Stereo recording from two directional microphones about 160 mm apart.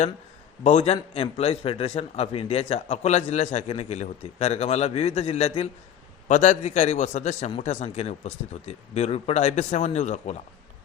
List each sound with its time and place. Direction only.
0.6 s a man's voice: 40° left (ahead or behind)